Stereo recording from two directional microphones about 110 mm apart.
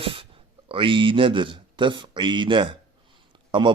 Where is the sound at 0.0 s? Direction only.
55° right (ahead or behind).